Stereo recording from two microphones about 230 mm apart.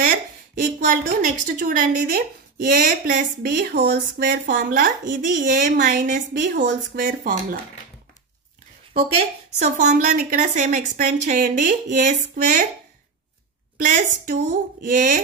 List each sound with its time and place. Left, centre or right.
0.7 s speech: right
9.6 s speech: right
13.7 s speech: right